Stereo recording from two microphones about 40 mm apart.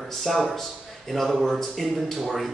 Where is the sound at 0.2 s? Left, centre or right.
Centre.